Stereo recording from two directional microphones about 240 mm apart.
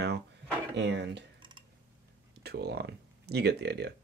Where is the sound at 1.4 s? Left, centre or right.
Centre.